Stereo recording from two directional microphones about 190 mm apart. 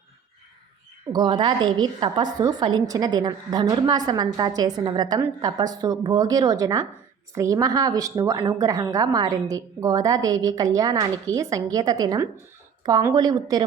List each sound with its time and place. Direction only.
1.1 s a woman's voice: 25° right (ahead or behind)